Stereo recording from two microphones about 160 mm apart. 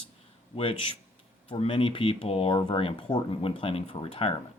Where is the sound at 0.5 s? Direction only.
35° left (ahead or behind).